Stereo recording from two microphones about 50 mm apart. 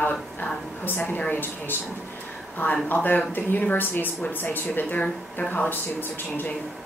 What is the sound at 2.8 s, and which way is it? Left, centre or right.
Speech, left.